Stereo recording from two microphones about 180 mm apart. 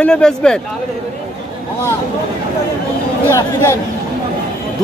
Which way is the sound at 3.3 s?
15° left (ahead or behind).